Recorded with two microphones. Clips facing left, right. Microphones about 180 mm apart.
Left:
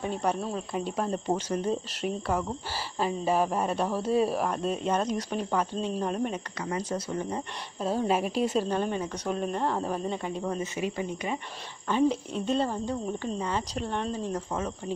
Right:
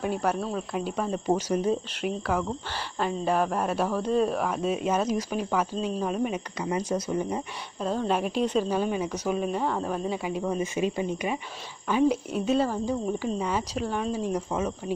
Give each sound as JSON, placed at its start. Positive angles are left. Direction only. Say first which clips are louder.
{"t": 0.0, "sound": "speech", "louder": "right 2 dB", "side_deg": -5}
{"t": 7.8, "sound": "speech", "louder": "even", "side_deg": 5}
{"t": 10.8, "sound": "speech", "louder": "right 4 dB", "side_deg": -20}
{"t": 11.9, "sound": "speech", "louder": "right 2 dB", "side_deg": -10}